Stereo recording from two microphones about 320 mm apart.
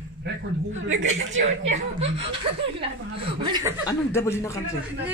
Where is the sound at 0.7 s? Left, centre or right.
Right.